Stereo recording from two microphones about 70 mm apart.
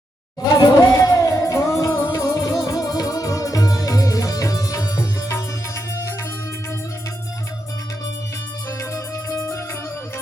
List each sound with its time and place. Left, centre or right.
0.5 s music: left
8.8 s music: left